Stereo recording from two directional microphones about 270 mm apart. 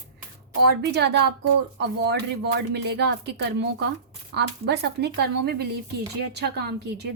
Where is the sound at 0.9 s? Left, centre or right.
Right.